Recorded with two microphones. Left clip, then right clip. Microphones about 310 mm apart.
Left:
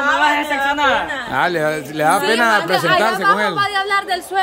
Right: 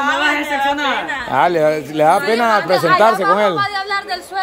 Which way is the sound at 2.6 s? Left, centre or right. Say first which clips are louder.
Right 2 dB; left.